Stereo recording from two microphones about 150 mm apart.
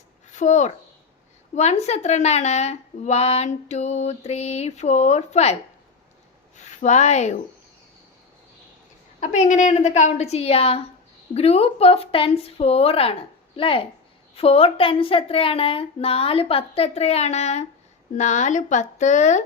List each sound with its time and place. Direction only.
0.3 s a child's voice: 55° left (ahead or behind)
6.7 s speech: 50° left (ahead or behind)
9.2 s speech: 55° left (ahead or behind)